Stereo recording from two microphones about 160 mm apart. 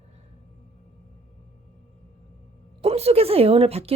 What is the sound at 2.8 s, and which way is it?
Speech, 40° right (ahead or behind).